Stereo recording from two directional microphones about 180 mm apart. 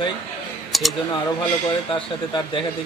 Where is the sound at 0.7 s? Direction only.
Centre (ahead or behind).